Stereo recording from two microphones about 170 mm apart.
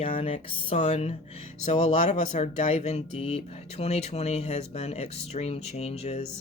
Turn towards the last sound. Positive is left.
turn(degrees=40)  # may be behind; listen again after turning